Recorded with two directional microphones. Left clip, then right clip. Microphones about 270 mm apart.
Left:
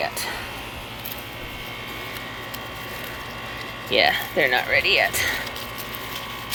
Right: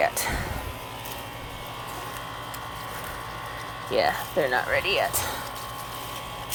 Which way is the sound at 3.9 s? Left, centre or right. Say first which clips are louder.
Left 5 dB; centre.